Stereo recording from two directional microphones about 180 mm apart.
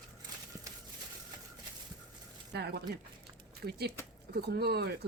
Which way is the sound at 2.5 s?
70° right (ahead or behind).